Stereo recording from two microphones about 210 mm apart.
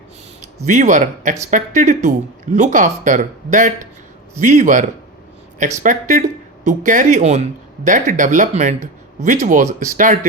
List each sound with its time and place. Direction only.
0.6 s speech: 35° right (ahead or behind)